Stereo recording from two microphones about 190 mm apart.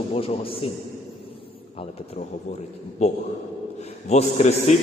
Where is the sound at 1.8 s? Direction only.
35° left (ahead or behind).